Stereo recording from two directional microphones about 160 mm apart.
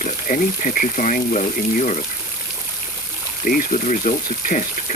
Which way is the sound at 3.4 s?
55° left (ahead or behind).